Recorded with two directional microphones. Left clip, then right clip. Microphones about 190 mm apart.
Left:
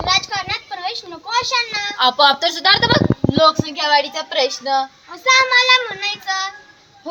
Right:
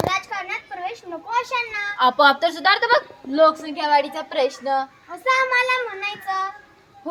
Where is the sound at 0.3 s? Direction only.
15° right (ahead or behind).